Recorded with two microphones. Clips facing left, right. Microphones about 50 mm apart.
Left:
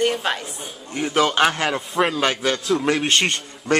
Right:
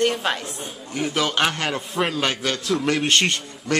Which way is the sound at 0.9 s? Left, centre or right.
Left.